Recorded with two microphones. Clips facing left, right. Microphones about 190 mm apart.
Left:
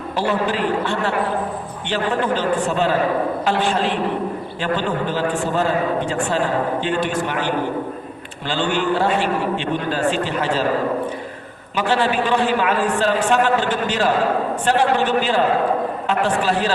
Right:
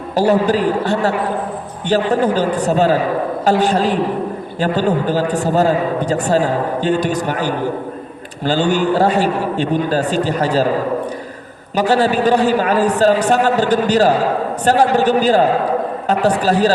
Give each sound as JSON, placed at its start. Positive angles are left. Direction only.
{"t": 0.2, "sound": "a man's voice", "side_deg": -40}
{"t": 11.8, "sound": "a man's voice", "side_deg": -40}